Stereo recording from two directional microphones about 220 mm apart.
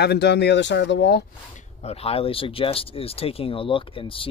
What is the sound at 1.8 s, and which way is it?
Speech, 30° left (ahead or behind).